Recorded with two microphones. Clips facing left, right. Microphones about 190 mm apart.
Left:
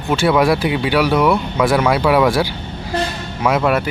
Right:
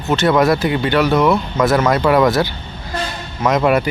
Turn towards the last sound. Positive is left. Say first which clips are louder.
# right 1 dB
turn(degrees=0)  # may be behind; listen again after turning